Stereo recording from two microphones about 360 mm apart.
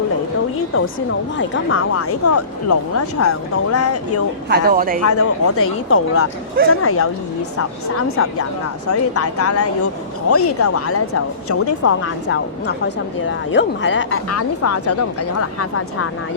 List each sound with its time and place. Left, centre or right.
0.8 s speech: left
4.4 s speech: right
5.0 s speech: left
12.6 s a woman's voice: left
14.3 s speech: left